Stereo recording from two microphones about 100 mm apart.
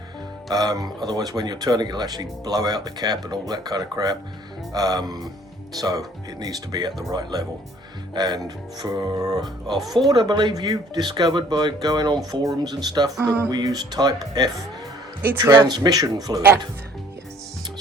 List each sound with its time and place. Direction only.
0.5 s speech: 40° right (ahead or behind)
9.7 s speech: centre (ahead or behind)
10.1 s speech: 50° right (ahead or behind)